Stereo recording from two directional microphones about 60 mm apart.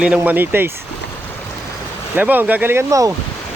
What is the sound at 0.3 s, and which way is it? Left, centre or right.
Speech, right.